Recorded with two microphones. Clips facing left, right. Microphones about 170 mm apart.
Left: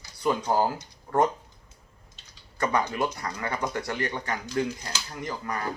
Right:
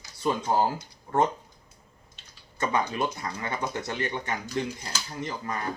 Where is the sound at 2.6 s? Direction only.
20° right (ahead or behind).